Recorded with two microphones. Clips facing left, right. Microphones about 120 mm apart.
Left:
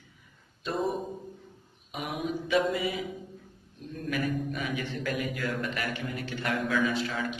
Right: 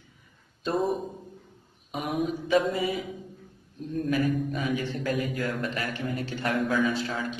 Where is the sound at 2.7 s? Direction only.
35° right (ahead or behind).